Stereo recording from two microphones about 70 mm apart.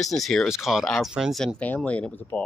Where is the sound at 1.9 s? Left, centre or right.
Centre.